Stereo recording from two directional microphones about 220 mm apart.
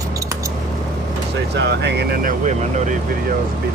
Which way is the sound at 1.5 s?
50° right (ahead or behind).